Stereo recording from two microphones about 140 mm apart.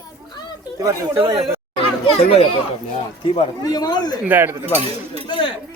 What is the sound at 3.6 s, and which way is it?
Speech, 25° left (ahead or behind).